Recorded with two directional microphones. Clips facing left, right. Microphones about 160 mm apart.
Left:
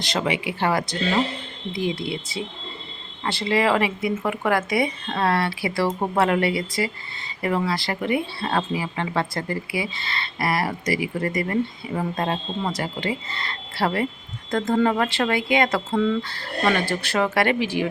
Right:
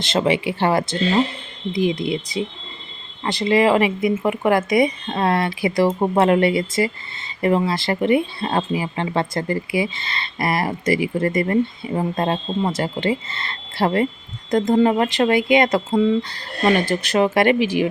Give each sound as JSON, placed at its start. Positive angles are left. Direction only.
{"t": 0.0, "sound": "speech", "side_deg": -25}
{"t": 11.2, "sound": "speech", "side_deg": -50}
{"t": 11.9, "sound": "speech", "side_deg": -30}